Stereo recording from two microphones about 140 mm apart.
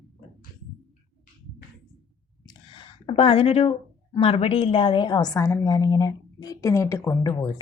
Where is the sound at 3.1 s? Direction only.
40° left (ahead or behind).